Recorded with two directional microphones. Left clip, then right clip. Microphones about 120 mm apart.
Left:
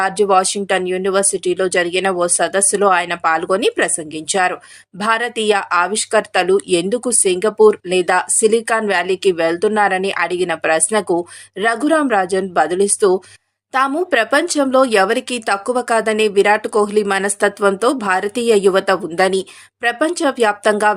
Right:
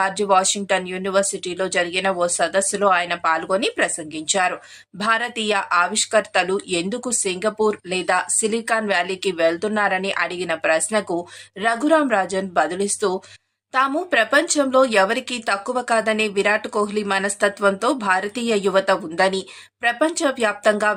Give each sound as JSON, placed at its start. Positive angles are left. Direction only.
{"t": 0.0, "sound": "speech", "side_deg": 25}